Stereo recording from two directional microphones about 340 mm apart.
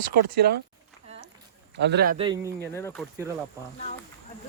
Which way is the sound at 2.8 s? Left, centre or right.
Centre.